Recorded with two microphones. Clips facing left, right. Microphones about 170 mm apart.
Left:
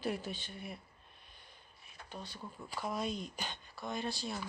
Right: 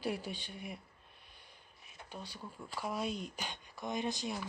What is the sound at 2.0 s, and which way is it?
Speech, 10° right (ahead or behind).